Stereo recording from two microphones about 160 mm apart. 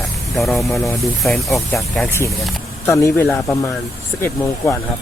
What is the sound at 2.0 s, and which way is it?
Speech, 15° left (ahead or behind).